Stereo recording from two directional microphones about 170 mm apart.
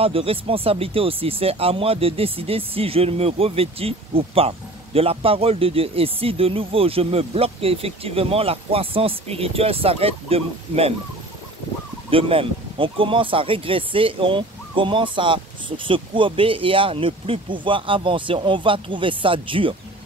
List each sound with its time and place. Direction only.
0.0 s speech: 35° right (ahead or behind)
12.1 s speech: 35° right (ahead or behind)